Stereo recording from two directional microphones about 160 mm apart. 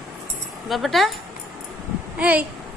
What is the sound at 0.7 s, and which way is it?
Speech, centre (ahead or behind).